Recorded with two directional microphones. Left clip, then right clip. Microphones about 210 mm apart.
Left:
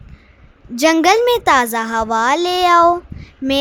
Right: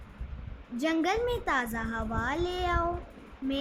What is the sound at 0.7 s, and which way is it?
A child's voice, 50° left (ahead or behind).